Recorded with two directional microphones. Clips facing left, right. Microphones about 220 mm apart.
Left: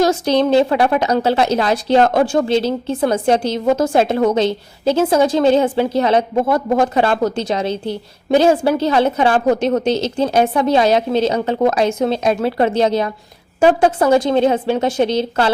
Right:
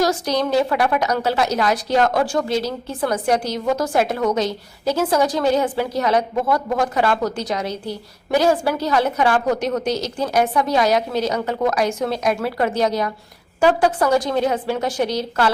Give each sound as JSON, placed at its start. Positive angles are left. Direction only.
{"t": 0.0, "sound": "a woman's voice", "side_deg": 25}